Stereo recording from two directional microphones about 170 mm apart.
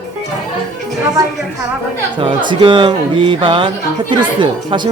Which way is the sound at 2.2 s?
30° right (ahead or behind).